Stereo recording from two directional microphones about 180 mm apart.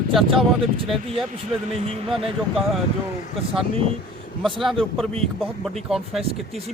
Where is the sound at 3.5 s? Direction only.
30° right (ahead or behind).